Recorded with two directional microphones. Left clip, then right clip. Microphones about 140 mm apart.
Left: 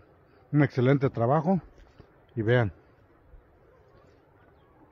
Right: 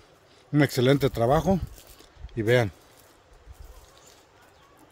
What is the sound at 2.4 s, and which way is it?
Speech, 25° right (ahead or behind).